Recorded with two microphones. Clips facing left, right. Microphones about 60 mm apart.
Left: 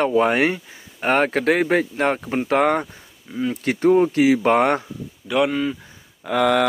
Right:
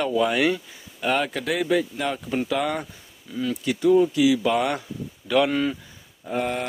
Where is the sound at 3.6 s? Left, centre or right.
Left.